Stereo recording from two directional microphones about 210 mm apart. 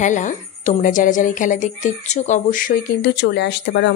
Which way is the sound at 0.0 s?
35° left (ahead or behind).